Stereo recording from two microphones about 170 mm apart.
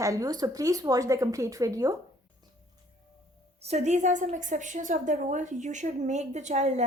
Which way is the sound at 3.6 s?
40° right (ahead or behind).